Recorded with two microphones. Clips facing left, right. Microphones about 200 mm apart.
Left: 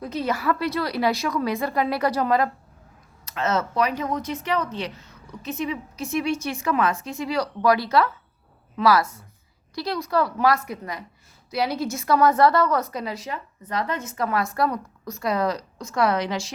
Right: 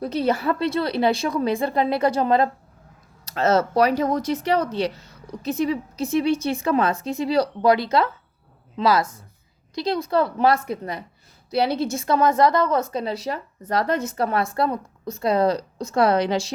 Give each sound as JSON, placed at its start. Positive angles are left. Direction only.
{"t": 0.0, "sound": "a woman's voice", "side_deg": -35}
{"t": 3.2, "sound": "a woman's voice", "side_deg": -35}